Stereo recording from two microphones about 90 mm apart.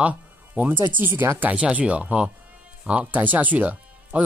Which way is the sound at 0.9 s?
25° right (ahead or behind).